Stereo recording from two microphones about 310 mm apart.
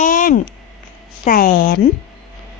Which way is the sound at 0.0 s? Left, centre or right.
Left.